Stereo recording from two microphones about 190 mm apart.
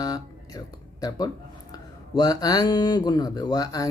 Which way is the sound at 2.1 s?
20° left (ahead or behind).